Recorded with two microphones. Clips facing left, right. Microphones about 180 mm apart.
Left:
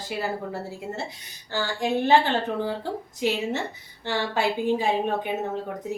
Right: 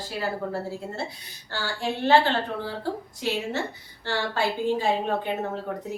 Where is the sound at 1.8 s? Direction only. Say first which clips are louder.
Left 2 dB; 15° left (ahead or behind).